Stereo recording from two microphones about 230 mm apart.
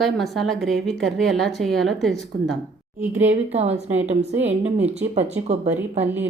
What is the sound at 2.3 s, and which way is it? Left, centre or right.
Speech, right.